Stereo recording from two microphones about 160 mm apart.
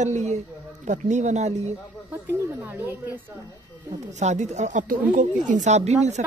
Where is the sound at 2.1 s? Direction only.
15° right (ahead or behind).